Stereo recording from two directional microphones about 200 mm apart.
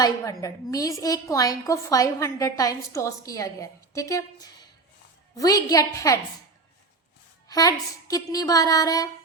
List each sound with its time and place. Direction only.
0.0 s a woman's voice: 15° left (ahead or behind)
7.4 s a woman's voice: 20° left (ahead or behind)